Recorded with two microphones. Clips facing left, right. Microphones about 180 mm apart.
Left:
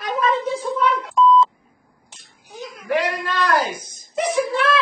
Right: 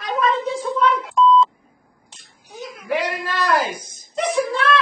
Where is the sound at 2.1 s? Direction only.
Centre (ahead or behind).